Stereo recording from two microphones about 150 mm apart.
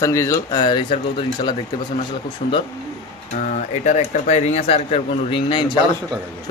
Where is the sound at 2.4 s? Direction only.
60° left (ahead or behind).